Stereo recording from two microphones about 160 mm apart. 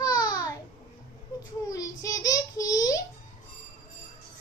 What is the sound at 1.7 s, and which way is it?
Speech, 20° left (ahead or behind).